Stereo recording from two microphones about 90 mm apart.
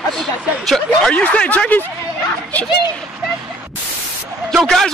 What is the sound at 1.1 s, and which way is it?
Speech, 15° left (ahead or behind).